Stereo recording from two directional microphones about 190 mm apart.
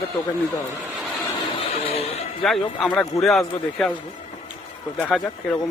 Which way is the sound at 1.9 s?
30° left (ahead or behind).